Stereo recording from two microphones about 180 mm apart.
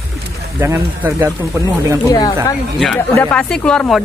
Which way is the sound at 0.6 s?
15° right (ahead or behind).